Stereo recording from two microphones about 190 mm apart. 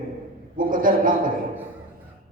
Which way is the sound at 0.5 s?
45° right (ahead or behind).